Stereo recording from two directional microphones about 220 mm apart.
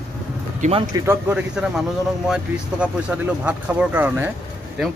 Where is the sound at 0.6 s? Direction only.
25° right (ahead or behind).